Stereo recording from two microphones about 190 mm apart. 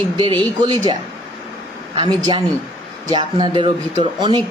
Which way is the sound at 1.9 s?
25° right (ahead or behind).